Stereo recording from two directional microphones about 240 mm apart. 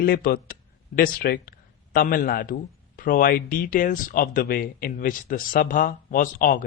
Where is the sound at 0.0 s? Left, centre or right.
Left.